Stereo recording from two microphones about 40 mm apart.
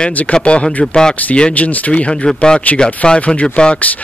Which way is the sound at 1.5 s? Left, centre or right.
Left.